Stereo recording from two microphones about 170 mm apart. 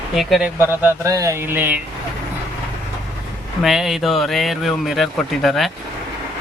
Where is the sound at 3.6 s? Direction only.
Centre (ahead or behind).